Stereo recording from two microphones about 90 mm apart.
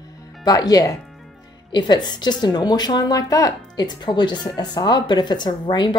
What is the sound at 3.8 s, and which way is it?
Speech, 55° left (ahead or behind).